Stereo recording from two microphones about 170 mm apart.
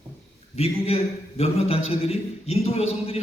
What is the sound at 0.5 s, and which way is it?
A man's voice, 35° left (ahead or behind).